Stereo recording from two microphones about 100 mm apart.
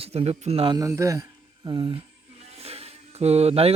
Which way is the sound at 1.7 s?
45° right (ahead or behind).